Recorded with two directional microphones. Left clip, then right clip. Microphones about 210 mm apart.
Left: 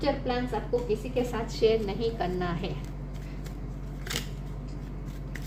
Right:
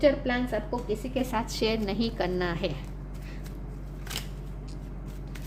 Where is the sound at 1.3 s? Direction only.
50° right (ahead or behind).